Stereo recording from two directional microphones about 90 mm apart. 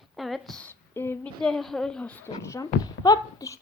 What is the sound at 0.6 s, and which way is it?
Speech, 25° left (ahead or behind).